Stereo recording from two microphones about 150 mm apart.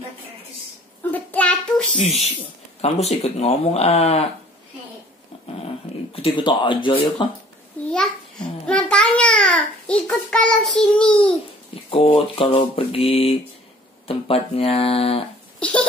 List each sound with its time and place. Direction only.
1.1 s child singing: 10° left (ahead or behind)
2.0 s speech: 45° left (ahead or behind)
6.1 s speech: 35° left (ahead or behind)
8.6 s a sound: 5° left (ahead or behind)
11.7 s speech: 40° left (ahead or behind)
15.6 s a sound: 10° left (ahead or behind)